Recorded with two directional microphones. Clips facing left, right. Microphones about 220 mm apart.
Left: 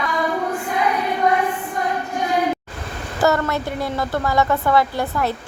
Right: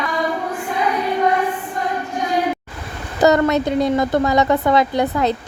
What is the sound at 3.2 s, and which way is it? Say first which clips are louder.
A woman's voice: right 5 dB; 20° right (ahead or behind).